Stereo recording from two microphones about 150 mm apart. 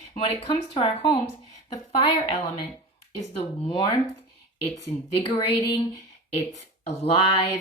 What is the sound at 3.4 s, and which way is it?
Speech, 40° left (ahead or behind).